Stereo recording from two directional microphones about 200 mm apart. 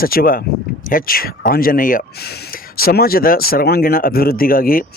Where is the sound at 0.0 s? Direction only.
45° left (ahead or behind).